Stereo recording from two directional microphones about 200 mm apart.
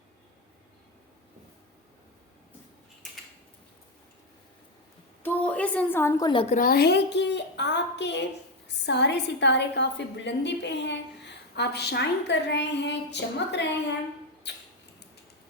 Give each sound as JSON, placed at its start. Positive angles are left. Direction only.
{"t": 5.2, "sound": "a woman's voice", "side_deg": 10}
{"t": 6.6, "sound": "a woman's voice", "side_deg": 50}